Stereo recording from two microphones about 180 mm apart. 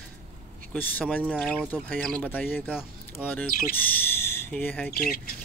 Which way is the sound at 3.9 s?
10° left (ahead or behind).